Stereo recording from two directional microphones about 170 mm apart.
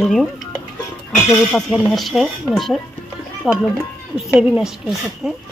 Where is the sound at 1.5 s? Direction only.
Centre (ahead or behind).